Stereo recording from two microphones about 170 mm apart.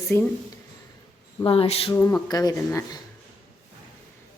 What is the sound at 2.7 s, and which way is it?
Speech, 15° left (ahead or behind).